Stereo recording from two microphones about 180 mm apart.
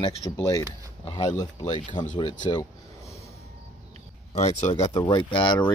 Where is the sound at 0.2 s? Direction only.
20° left (ahead or behind).